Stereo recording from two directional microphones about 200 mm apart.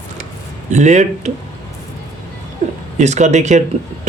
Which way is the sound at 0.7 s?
35° right (ahead or behind).